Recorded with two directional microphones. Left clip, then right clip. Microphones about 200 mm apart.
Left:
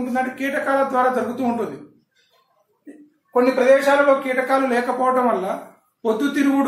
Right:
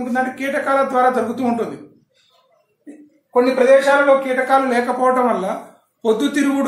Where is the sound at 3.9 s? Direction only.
15° right (ahead or behind).